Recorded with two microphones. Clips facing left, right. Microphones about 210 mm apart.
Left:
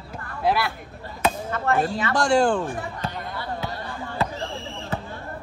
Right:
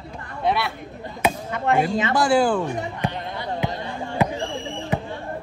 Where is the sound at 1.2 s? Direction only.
15° right (ahead or behind).